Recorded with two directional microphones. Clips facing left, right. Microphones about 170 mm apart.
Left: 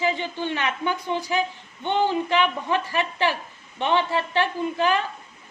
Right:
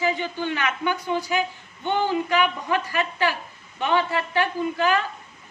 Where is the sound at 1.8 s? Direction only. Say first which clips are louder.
Left 1 dB; 25° left (ahead or behind).